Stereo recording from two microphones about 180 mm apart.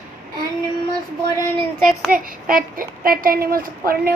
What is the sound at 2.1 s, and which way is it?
A woman's voice, 50° right (ahead or behind).